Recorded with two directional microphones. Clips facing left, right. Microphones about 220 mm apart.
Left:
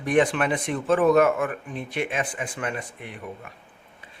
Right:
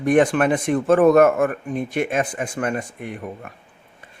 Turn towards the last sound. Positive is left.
turn(degrees=-45)  # may be behind; listen again after turning